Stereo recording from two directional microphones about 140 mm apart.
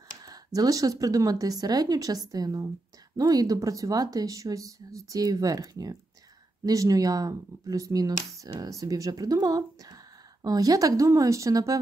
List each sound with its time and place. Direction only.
0.2 s speech: 25° right (ahead or behind)